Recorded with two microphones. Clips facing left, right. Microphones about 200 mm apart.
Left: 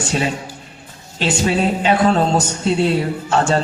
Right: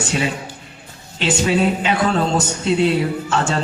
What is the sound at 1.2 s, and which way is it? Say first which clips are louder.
Speech: even; 35° left (ahead or behind).